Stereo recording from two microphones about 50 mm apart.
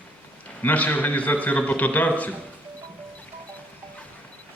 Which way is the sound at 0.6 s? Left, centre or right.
Left.